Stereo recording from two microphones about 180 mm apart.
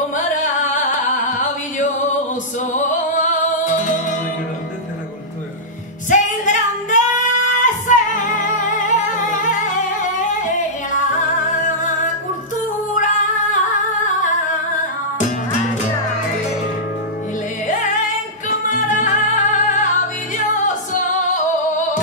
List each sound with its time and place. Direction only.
0.1 s music: 45° left (ahead or behind)
6.0 s female singing: 45° left (ahead or behind)
11.6 s music: 45° left (ahead or behind)
12.9 s dog: 45° left (ahead or behind)
18.7 s music: 45° left (ahead or behind)